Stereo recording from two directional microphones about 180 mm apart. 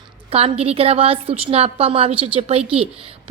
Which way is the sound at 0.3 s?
35° right (ahead or behind).